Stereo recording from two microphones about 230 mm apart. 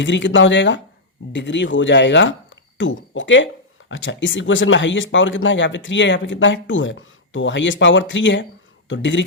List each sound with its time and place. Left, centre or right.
0.0 s speech: left